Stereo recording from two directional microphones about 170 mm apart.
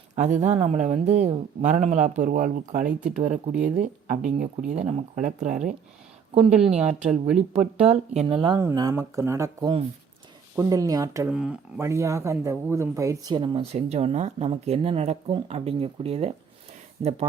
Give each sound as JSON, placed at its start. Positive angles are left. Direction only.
{"t": 0.2, "sound": "speech", "side_deg": -45}
{"t": 6.5, "sound": "a woman's voice", "side_deg": -5}
{"t": 7.3, "sound": "speech", "side_deg": -40}
{"t": 8.5, "sound": "speech", "side_deg": -20}
{"t": 11.3, "sound": "a woman's voice", "side_deg": -5}
{"t": 11.8, "sound": "speech", "side_deg": -15}